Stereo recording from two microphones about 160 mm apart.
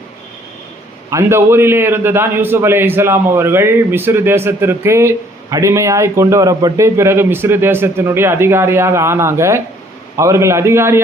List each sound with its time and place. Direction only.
1.1 s a man's voice: 15° right (ahead or behind)